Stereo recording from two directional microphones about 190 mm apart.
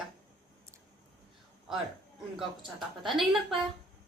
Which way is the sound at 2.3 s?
Centre (ahead or behind).